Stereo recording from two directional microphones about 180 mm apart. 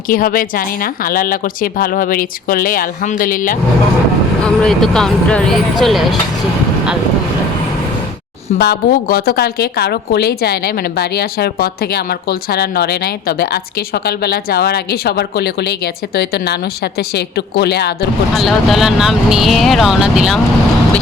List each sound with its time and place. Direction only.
0.1 s speech: 50° left (ahead or behind)
4.4 s speech: 5° left (ahead or behind)
8.5 s a woman's voice: 65° left (ahead or behind)
18.3 s speech: centre (ahead or behind)